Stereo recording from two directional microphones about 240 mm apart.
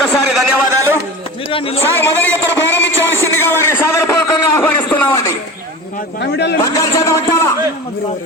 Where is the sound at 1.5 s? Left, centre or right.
Left.